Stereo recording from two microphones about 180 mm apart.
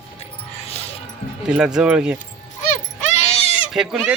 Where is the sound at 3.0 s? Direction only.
35° left (ahead or behind).